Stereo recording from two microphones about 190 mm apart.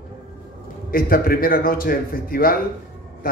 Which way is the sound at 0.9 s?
50° left (ahead or behind).